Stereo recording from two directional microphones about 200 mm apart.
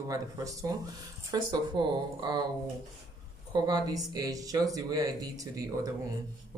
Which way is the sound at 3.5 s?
20° right (ahead or behind).